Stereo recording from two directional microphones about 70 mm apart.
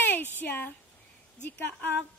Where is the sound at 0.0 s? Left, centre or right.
Left.